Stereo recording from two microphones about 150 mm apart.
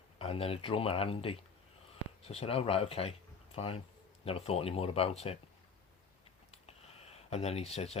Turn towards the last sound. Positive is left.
turn(degrees=45)  # may be behind; listen again after turning